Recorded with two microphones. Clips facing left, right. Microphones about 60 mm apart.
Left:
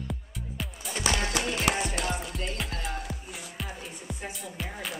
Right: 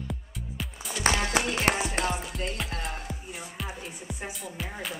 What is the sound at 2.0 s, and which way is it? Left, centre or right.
Music, centre.